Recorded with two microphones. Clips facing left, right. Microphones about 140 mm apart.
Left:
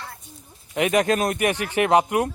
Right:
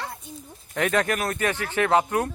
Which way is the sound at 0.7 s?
15° left (ahead or behind).